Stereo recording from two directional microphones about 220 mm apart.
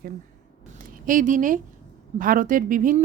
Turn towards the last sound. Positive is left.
turn(degrees=-40)  # may be behind; listen again after turning